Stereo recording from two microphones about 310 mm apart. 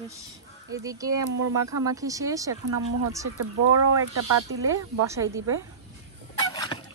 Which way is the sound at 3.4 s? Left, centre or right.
Right.